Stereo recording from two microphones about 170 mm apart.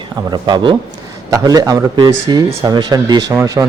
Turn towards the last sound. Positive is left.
turn(degrees=-20)  # may be behind; listen again after turning